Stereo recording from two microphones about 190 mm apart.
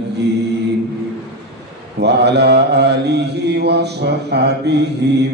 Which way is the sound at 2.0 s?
60° right (ahead or behind).